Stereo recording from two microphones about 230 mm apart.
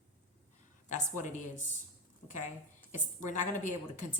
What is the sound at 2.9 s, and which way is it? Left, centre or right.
Speech, left.